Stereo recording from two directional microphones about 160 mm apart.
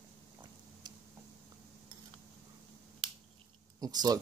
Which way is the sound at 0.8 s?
25° right (ahead or behind).